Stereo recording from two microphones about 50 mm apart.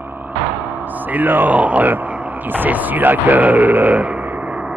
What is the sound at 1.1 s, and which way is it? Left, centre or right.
Speech, right.